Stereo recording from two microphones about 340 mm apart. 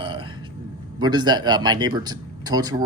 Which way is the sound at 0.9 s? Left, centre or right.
Centre.